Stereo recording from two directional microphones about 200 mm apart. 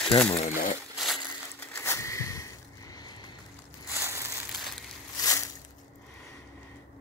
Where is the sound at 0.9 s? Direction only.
Centre (ahead or behind).